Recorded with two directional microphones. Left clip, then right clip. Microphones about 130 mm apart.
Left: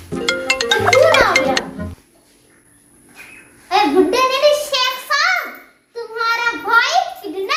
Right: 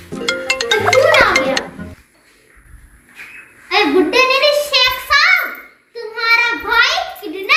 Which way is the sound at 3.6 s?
30° left (ahead or behind).